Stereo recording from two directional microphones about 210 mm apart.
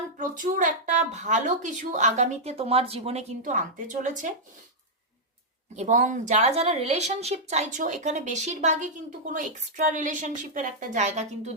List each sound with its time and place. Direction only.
0.2 s speech: 40° right (ahead or behind)
5.7 s speech: 35° right (ahead or behind)